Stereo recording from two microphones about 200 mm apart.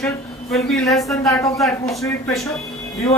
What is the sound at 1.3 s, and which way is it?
Speech, 15° left (ahead or behind).